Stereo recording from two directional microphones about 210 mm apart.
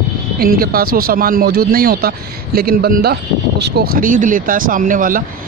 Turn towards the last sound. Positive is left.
turn(degrees=-40)  # may be behind; listen again after turning